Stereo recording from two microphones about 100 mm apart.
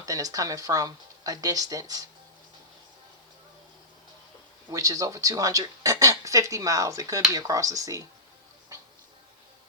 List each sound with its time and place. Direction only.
0.0 s speech: 35° right (ahead or behind)
4.7 s speech: 35° right (ahead or behind)